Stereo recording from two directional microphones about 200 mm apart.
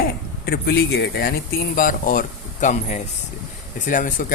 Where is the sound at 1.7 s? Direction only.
40° left (ahead or behind).